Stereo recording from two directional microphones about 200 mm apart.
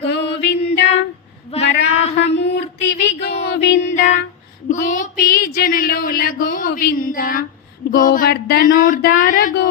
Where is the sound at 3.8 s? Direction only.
35° left (ahead or behind).